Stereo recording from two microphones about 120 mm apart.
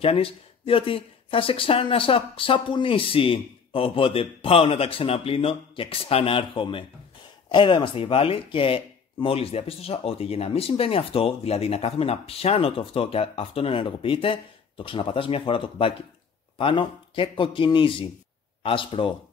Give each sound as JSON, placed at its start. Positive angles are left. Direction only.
{"t": 0.0, "sound": "speech", "side_deg": 50}